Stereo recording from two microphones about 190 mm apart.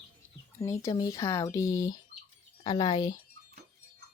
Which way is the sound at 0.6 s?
15° left (ahead or behind).